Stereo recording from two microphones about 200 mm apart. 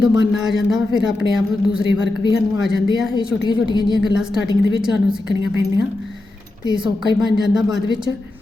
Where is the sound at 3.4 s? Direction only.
20° left (ahead or behind).